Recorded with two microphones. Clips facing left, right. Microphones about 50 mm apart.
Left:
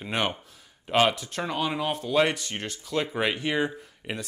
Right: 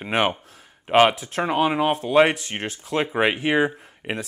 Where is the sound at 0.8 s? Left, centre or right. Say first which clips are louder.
Right 6 dB; right.